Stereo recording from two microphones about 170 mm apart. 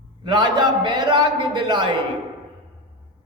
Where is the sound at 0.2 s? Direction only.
25° right (ahead or behind).